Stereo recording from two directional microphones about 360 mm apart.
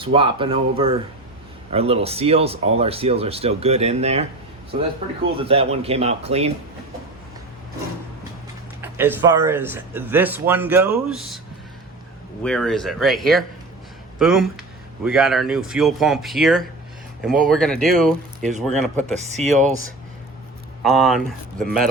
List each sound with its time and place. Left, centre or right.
0.0 s speech: centre
5.4 s speech: centre
8.8 s speech: centre
12.4 s speech: centre
18.4 s speech: centre
20.8 s speech: centre